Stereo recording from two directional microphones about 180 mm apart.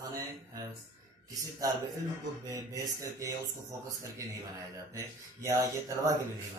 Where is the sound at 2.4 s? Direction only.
20° right (ahead or behind).